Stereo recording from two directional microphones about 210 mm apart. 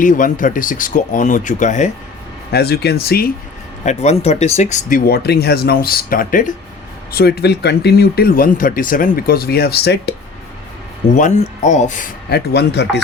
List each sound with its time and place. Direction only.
0.0 s speech: 40° left (ahead or behind)
2.5 s speech: 50° left (ahead or behind)
3.8 s speech: 30° left (ahead or behind); by 10.2 s 50° left (ahead or behind)
11.2 s speech: 35° left (ahead or behind); by 13.0 s 55° left (ahead or behind)